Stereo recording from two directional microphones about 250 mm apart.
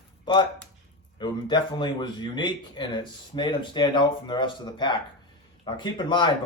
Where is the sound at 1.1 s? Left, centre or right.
Centre.